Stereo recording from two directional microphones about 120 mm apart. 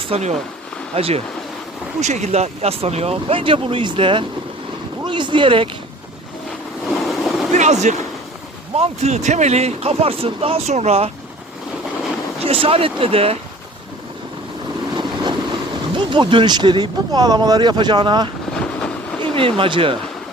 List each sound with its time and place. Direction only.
0.0 s speech: 60° right (ahead or behind)
2.0 s speech: 70° right (ahead or behind); by 4.3 s 45° right (ahead or behind)
5.0 s a sound: 40° right (ahead or behind)
6.8 s a sound: centre (ahead or behind)
7.5 s speech: 75° right (ahead or behind)
8.7 s speech: 65° right (ahead or behind)
12.5 s speech: 50° right (ahead or behind)
14.9 s vehicle: 40° right (ahead or behind)
16.0 s speech: 40° right (ahead or behind)
18.6 s train: 10° left (ahead or behind)
19.2 s speech: 50° right (ahead or behind)